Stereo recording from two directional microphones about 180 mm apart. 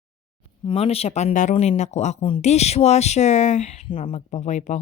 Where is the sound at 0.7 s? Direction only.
35° left (ahead or behind).